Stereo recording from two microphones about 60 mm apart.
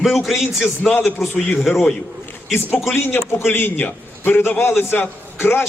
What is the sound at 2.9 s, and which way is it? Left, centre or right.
A man's voice, left.